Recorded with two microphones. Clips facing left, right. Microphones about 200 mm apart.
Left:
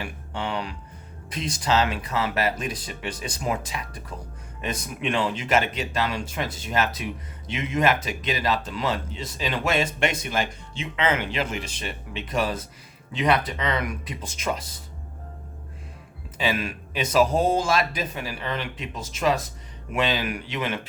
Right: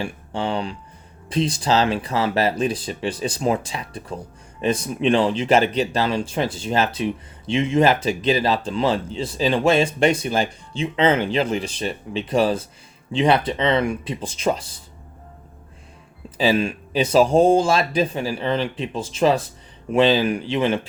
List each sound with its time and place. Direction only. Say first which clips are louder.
0.0 s speech: right 6 dB; 30° right (ahead or behind)
16.4 s speech: right 7 dB; 30° right (ahead or behind)